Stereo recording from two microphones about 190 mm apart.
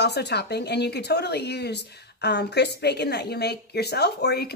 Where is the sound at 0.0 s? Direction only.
60° left (ahead or behind).